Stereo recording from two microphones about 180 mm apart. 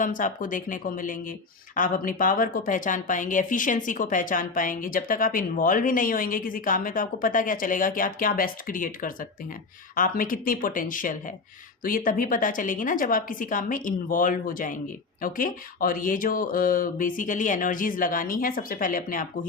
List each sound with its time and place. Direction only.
0.0 s a woman's voice: 45° left (ahead or behind)